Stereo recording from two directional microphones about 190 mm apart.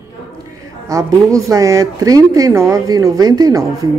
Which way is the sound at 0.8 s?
15° right (ahead or behind).